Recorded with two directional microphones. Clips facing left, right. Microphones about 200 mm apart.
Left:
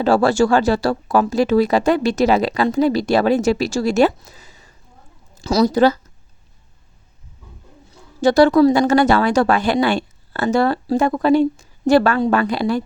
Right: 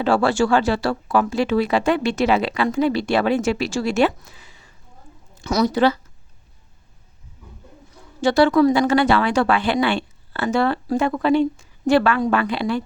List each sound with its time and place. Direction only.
0.0 s a woman's voice: 40° left (ahead or behind)
8.2 s speech: 40° left (ahead or behind)